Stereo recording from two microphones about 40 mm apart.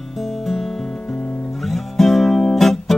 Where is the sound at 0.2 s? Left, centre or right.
Centre.